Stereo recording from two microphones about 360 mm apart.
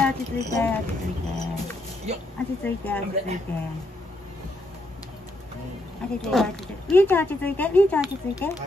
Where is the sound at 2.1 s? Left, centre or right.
Centre.